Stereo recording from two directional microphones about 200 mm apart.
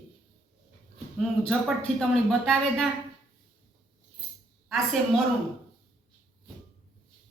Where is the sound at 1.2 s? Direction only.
Centre (ahead or behind).